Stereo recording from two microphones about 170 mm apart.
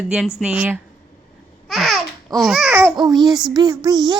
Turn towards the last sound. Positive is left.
turn(degrees=-25)  # may be behind; listen again after turning